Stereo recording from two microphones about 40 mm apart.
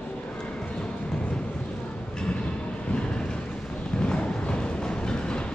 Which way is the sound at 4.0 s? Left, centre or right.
Left.